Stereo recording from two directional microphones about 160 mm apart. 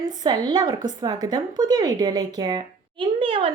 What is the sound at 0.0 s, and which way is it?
A woman's voice, 25° right (ahead or behind).